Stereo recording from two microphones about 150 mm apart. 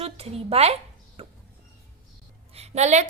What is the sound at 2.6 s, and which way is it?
Speech, 50° right (ahead or behind).